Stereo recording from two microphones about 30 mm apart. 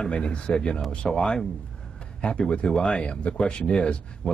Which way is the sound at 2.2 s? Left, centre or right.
Left.